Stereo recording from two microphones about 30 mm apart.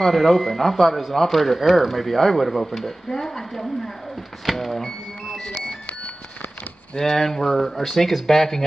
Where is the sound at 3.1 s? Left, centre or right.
Centre.